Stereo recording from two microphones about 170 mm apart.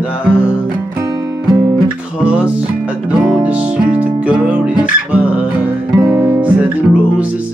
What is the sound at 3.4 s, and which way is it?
Music, 10° right (ahead or behind).